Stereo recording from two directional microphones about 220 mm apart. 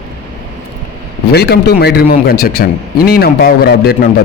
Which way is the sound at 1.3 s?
50° left (ahead or behind).